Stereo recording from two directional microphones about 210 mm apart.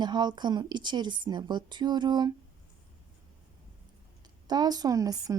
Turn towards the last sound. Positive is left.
turn(degrees=-15)  # may be behind; listen again after turning